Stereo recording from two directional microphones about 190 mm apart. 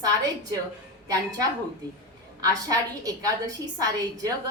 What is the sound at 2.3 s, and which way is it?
A woman's voice, 20° right (ahead or behind).